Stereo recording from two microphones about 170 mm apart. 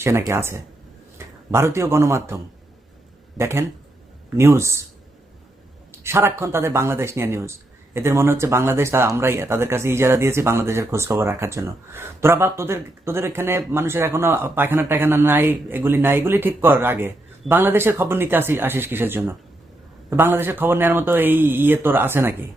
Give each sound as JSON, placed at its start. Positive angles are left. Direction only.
{"t": 0.0, "sound": "speech", "side_deg": -15}
{"t": 5.9, "sound": "speech", "side_deg": -15}